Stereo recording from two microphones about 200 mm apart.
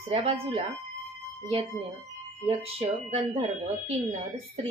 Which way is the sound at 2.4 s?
30° right (ahead or behind).